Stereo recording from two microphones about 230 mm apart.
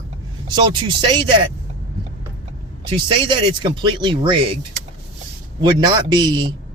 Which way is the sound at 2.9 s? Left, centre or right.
Right.